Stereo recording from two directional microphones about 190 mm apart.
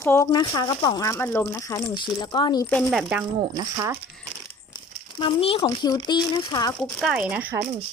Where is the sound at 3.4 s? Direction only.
20° right (ahead or behind).